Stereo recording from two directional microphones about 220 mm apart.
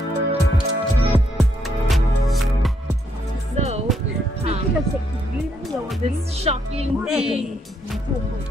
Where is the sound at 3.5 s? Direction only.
30° right (ahead or behind).